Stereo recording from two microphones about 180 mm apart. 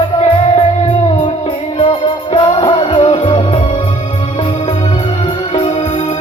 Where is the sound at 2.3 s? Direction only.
30° left (ahead or behind).